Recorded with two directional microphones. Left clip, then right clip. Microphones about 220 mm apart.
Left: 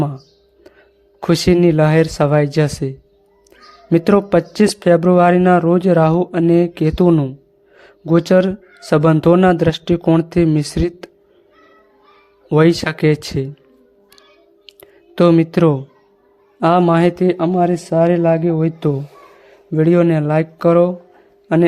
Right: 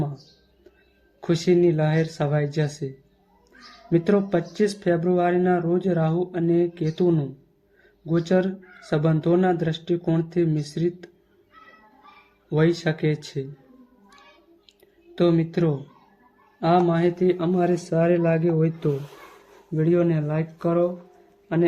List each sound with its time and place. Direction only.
1.2 s speech: 45° left (ahead or behind)
12.5 s speech: 45° left (ahead or behind)
14.7 s whispering: 45° left (ahead or behind)
16.6 s speech: 50° left (ahead or behind)